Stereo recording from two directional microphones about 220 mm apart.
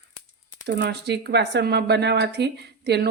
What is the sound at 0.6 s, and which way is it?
Speech, 50° right (ahead or behind).